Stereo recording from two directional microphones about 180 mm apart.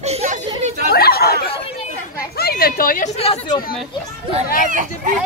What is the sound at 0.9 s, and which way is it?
Chatter, 60° left (ahead or behind).